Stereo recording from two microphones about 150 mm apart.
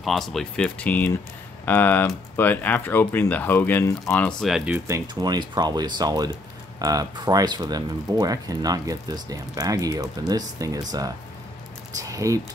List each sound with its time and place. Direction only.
0.0 s speech: centre (ahead or behind)
4.8 s speech: 25° right (ahead or behind)